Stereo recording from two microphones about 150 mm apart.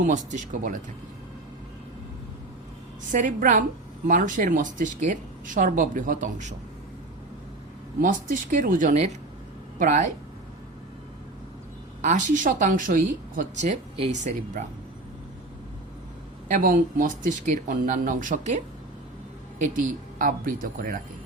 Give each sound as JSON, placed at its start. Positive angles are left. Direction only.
{"t": 0.0, "sound": "a woman's voice", "side_deg": -55}
{"t": 3.1, "sound": "a woman's voice", "side_deg": -60}
{"t": 8.0, "sound": "a woman's voice", "side_deg": -60}
{"t": 12.0, "sound": "a woman's voice", "side_deg": -55}
{"t": 16.5, "sound": "a woman's voice", "side_deg": -70}
{"t": 19.7, "sound": "a woman's voice", "side_deg": -60}